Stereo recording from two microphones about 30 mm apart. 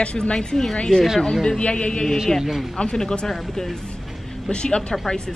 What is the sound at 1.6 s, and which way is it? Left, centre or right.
Speech, left.